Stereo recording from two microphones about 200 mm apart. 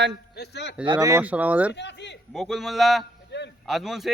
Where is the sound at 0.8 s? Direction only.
20° right (ahead or behind).